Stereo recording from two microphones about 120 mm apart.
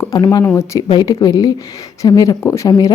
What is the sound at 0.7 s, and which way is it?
Speech, 35° left (ahead or behind).